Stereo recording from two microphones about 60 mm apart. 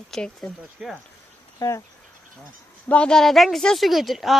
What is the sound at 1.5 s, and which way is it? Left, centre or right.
Speech, left.